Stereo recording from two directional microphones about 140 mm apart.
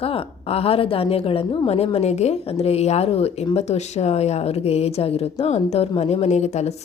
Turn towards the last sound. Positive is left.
turn(degrees=50)  # may be behind; listen again after turning